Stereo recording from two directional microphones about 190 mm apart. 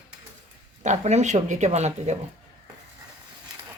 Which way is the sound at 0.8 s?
35° right (ahead or behind).